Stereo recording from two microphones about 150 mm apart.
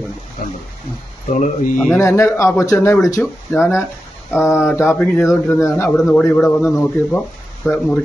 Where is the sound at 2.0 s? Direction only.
20° left (ahead or behind); by 8.0 s centre (ahead or behind).